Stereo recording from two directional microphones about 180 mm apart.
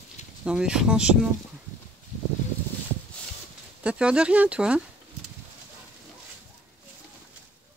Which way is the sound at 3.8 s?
5° right (ahead or behind).